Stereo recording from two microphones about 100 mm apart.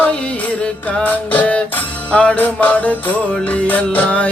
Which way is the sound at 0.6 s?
15° left (ahead or behind).